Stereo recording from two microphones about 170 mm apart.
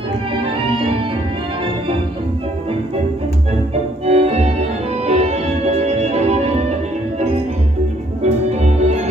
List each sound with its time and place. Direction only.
0.6 s music: 30° right (ahead or behind)
4.0 s music: 40° right (ahead or behind)
8.2 s music: 40° right (ahead or behind)